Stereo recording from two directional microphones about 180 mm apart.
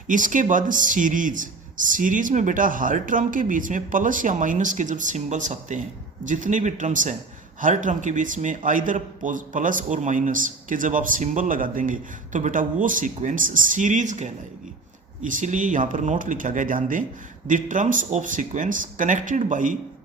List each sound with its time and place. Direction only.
0.1 s a man's voice: 45° right (ahead or behind)